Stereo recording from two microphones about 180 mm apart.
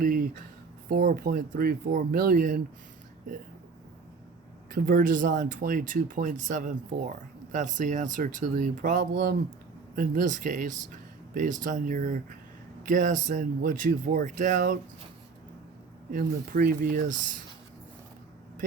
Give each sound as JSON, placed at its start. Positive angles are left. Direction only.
{"t": 0.0, "sound": "speech", "side_deg": -50}
{"t": 4.7, "sound": "speech", "side_deg": -50}
{"t": 16.1, "sound": "speech", "side_deg": -50}